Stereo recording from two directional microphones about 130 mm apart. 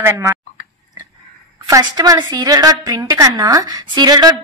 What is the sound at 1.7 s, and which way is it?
A woman's voice, 25° right (ahead or behind).